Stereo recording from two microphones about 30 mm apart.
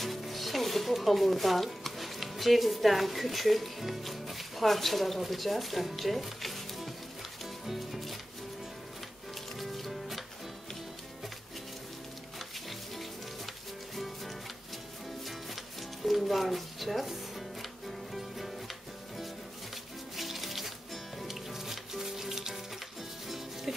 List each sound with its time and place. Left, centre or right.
0.0 s speech: centre
7.6 s music: centre
9.6 s music: centre
12.4 s music: centre
20.2 s music: centre